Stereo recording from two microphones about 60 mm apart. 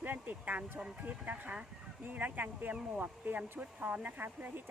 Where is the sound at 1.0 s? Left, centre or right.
Right.